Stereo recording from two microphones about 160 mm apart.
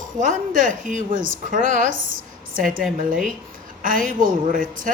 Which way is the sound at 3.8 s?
60° right (ahead or behind).